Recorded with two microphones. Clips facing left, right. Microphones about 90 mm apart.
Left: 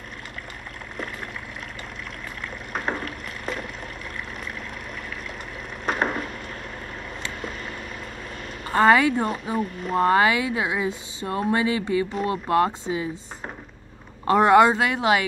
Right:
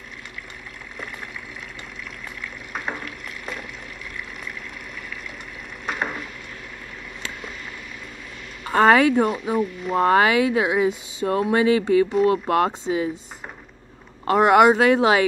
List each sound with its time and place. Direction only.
2.9 s a sound: 40° left (ahead or behind)
6.0 s a sound: 40° left (ahead or behind)
8.7 s speech: 15° right (ahead or behind)
9.2 s speech: 5° right (ahead or behind)
10.1 s speech: 15° right (ahead or behind)
11.2 s speech: 5° right (ahead or behind)
12.1 s speech: centre (ahead or behind)
12.4 s speech: 15° right (ahead or behind)
14.3 s speech: 15° right (ahead or behind)